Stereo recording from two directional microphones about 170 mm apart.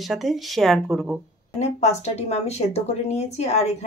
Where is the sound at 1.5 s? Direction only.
40° left (ahead or behind).